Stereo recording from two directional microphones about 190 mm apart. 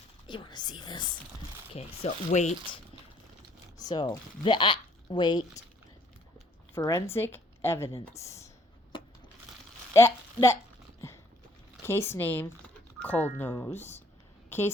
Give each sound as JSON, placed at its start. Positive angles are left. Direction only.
{"t": 0.3, "sound": "speech", "side_deg": 25}
{"t": 3.8, "sound": "speech", "side_deg": 20}
{"t": 6.7, "sound": "speech", "side_deg": 15}
{"t": 8.9, "sound": "a sound", "side_deg": 25}
{"t": 9.9, "sound": "speech", "side_deg": 15}
{"t": 11.8, "sound": "speech", "side_deg": 15}